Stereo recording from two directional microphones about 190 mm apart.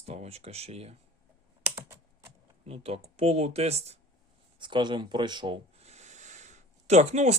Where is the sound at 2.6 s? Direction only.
30° right (ahead or behind).